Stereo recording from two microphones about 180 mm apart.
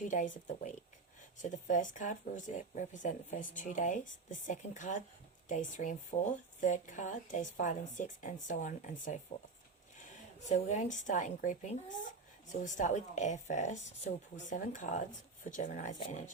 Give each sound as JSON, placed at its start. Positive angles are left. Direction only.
{"t": 0.1, "sound": "speech", "side_deg": 45}